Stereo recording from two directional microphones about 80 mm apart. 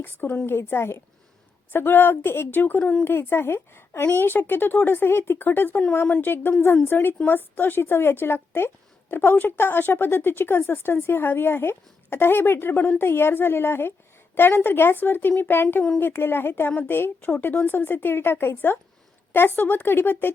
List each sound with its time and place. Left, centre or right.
0.0 s a woman's voice: left